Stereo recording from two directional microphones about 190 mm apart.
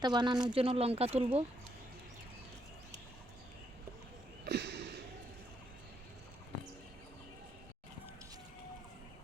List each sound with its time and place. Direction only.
0.0 s speech: 25° right (ahead or behind)
4.4 s sniff: 60° right (ahead or behind)